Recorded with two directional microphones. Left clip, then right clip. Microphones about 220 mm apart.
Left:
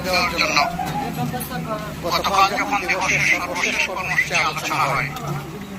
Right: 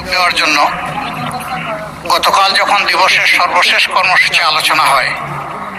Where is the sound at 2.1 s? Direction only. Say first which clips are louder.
Right 8 dB; 45° right (ahead or behind).